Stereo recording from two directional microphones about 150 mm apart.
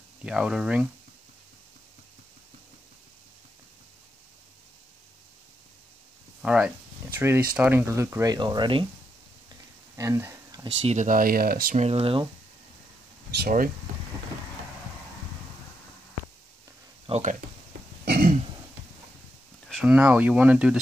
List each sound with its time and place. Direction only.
0.2 s speech: 5° right (ahead or behind)
6.4 s speech: 5° right (ahead or behind); by 8.8 s 30° right (ahead or behind)
9.9 s a sound: 20° right (ahead or behind)
10.8 s speech: 50° right (ahead or behind); by 11.7 s 75° right (ahead or behind)
11.7 s speech: 45° right (ahead or behind)
13.3 s speech: 80° right
17.1 s speech: 55° right (ahead or behind)
18.0 s throat clearing: 90° right
19.7 s speech: 5° right (ahead or behind)